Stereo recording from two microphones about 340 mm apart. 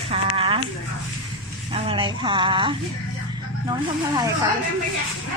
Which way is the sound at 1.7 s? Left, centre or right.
Centre.